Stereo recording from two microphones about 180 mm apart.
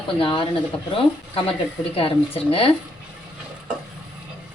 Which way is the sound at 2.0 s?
30° left (ahead or behind).